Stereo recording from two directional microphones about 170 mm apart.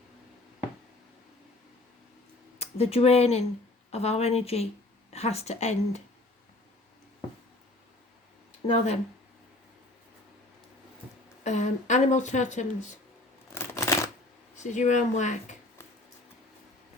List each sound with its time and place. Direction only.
2.6 s speech: 35° left (ahead or behind)
8.7 s speech: 40° left (ahead or behind)
11.4 s speech: 45° left (ahead or behind)
13.5 s a sound: 15° left (ahead or behind)
14.5 s speech: 45° left (ahead or behind)